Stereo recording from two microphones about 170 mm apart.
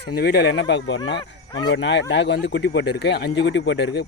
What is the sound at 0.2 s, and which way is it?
Speech, 80° left.